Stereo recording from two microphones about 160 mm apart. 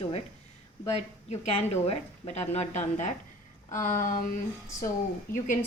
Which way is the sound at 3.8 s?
55° left (ahead or behind).